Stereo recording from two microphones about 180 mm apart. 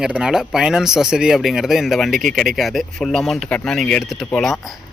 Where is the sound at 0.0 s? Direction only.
5° right (ahead or behind).